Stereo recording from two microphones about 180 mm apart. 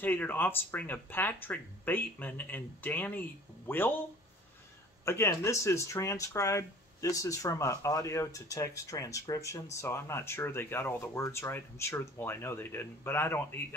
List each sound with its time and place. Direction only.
0.0 s speech: 10° left (ahead or behind)
5.0 s speech: 15° left (ahead or behind)